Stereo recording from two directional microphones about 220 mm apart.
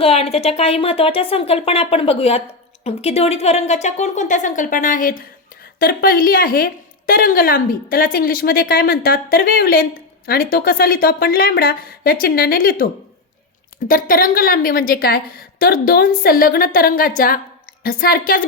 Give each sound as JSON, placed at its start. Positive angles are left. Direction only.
{"t": 0.0, "sound": "a woman's voice", "side_deg": 25}